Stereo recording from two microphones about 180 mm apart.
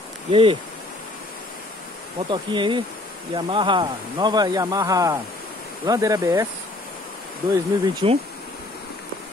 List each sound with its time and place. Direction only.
0.3 s speech: 30° right (ahead or behind)
2.3 s speech: 25° right (ahead or behind)
7.5 s speech: 20° right (ahead or behind)